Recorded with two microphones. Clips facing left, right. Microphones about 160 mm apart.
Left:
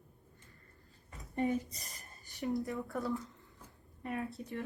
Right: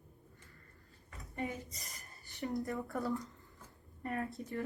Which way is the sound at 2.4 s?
Centre (ahead or behind).